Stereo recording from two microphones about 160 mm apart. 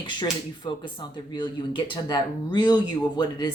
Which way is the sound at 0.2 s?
30° left (ahead or behind).